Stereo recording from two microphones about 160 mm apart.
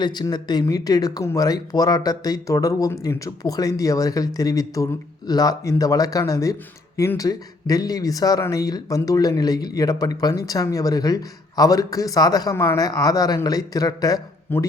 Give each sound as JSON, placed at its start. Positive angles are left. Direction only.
{"t": 0.0, "sound": "speech", "side_deg": 25}